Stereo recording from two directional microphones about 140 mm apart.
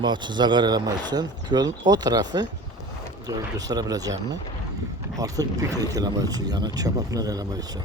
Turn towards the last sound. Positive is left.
turn(degrees=-25)  # may be behind; listen again after turning